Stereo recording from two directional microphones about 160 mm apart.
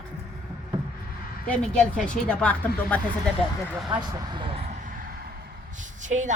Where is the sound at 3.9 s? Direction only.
30° right (ahead or behind); by 5.2 s 65° right (ahead or behind).